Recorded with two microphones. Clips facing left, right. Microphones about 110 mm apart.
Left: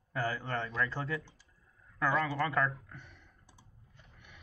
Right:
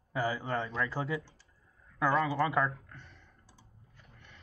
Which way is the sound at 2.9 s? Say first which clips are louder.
Left 1 dB; 5° left (ahead or behind).